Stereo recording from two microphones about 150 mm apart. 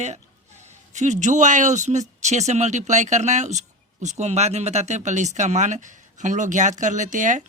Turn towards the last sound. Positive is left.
turn(degrees=-60)  # may be behind; listen again after turning